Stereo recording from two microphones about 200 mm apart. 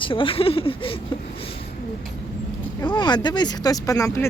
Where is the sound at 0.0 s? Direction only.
25° left (ahead or behind).